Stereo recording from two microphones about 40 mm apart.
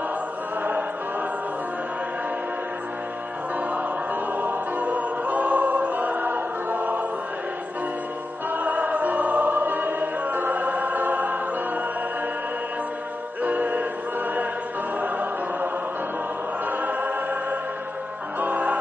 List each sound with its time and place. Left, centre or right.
3.7 s music: right
8.5 s music: right
13.4 s music: right
15.0 s music: right
16.6 s choir: right
18.4 s music: right